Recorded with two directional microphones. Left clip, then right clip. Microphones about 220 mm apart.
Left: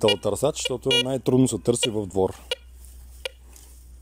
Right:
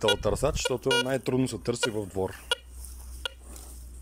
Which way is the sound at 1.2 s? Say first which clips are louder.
Left 7 dB; 30° left (ahead or behind).